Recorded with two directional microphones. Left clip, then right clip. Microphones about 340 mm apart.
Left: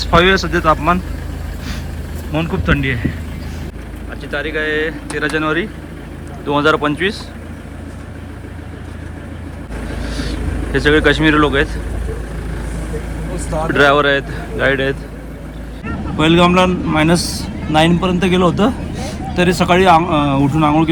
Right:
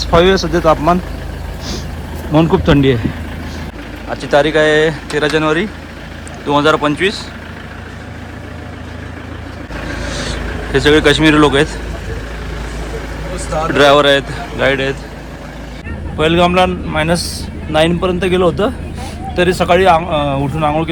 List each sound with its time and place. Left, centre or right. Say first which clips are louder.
0.0 s speech: right 1 dB; centre
2.6 s speech: right 6 dB; centre
4.2 s speech: right 9 dB; centre
10.1 s vehicle: right 2 dB; centre
13.7 s speech: right 3 dB; centre
16.1 s speech: right 1 dB; centre